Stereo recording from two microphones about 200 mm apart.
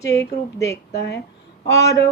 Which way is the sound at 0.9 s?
55° left (ahead or behind).